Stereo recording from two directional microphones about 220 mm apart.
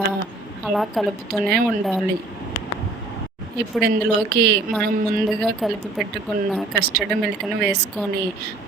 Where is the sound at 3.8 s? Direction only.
45° right (ahead or behind).